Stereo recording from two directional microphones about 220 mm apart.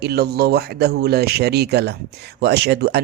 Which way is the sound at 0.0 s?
45° right (ahead or behind).